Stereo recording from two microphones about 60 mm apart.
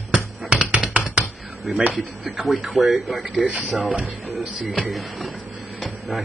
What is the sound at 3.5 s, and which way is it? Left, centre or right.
Speech, right.